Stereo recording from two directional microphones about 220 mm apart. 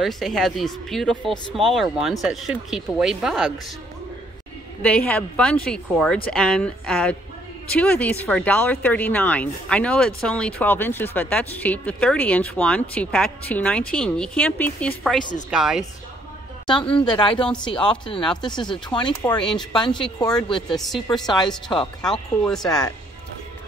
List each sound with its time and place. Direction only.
0.0 s speech: centre (ahead or behind)
4.8 s speech: 5° left (ahead or behind)
16.6 s speech: 20° left (ahead or behind)
20.7 s speech: centre (ahead or behind)